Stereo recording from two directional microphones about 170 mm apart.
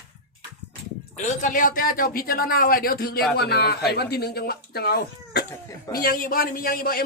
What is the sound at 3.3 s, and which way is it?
Speech, 70° left (ahead or behind).